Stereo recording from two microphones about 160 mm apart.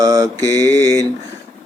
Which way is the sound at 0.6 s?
15° left (ahead or behind).